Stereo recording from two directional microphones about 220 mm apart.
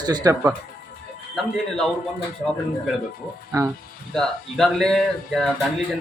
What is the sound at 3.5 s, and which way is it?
Speech, 15° right (ahead or behind).